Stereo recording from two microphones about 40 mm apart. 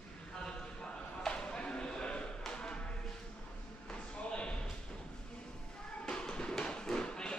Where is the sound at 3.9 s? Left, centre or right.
Left.